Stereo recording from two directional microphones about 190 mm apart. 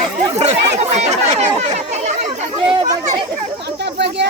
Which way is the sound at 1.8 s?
35° right (ahead or behind).